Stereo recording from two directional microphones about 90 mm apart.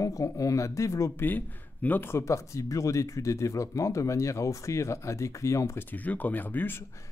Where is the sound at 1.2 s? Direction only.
20° left (ahead or behind).